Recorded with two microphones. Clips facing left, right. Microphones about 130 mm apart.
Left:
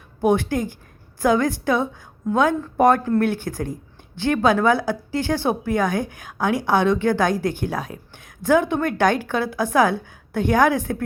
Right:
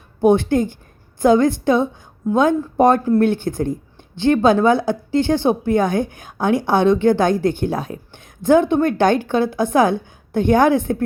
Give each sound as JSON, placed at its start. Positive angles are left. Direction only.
{"t": 0.2, "sound": "a woman's voice", "side_deg": -25}